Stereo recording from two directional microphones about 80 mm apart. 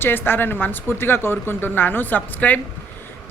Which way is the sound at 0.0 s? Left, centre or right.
Left.